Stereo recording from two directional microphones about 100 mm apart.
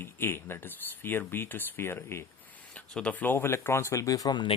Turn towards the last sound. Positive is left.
turn(degrees=40)  # may be behind; listen again after turning